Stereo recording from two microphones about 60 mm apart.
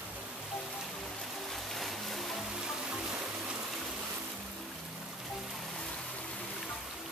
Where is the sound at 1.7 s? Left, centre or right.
Centre.